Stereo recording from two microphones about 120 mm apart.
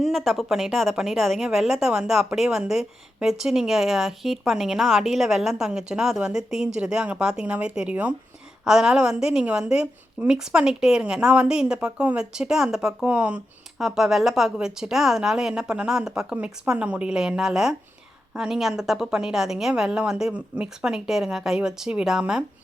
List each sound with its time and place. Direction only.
0.0 s a woman's voice: centre (ahead or behind)